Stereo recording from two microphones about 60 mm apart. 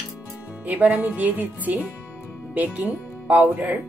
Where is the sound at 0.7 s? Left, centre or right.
Right.